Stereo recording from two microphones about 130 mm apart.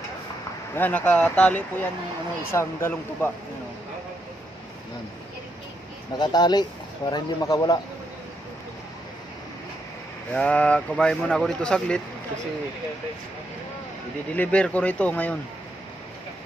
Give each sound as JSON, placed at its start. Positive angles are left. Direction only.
{"t": 0.7, "sound": "speech", "side_deg": 10}
{"t": 6.1, "sound": "speech", "side_deg": 35}
{"t": 10.3, "sound": "speech", "side_deg": 10}
{"t": 14.3, "sound": "speech", "side_deg": 10}